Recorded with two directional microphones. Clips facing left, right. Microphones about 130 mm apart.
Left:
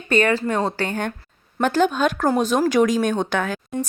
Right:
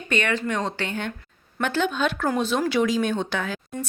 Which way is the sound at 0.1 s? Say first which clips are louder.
Left 6 dB; 40° left (ahead or behind).